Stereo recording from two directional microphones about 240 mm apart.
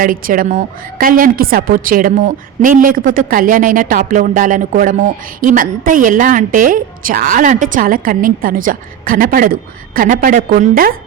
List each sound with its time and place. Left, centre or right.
0.0 s a woman's voice: right